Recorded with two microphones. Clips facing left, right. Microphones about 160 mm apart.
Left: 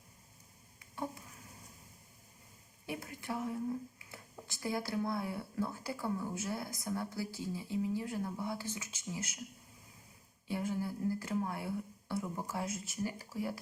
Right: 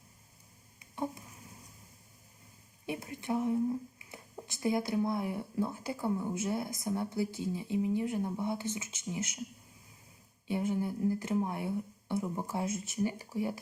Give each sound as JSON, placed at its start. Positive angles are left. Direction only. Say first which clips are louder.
{"t": 0.8, "sound": "a sound", "louder": "right 4 dB", "side_deg": -20}
{"t": 2.8, "sound": "speech", "louder": "right 4 dB", "side_deg": -20}
{"t": 10.5, "sound": "speech", "louder": "right 4 dB", "side_deg": -20}